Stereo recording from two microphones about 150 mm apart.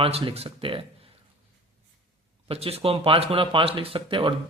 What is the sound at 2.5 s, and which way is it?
Speech, 40° right (ahead or behind).